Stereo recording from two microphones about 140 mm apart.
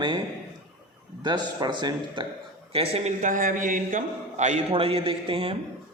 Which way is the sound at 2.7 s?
45° right (ahead or behind).